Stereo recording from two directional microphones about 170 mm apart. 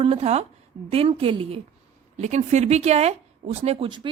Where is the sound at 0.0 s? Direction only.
35° right (ahead or behind).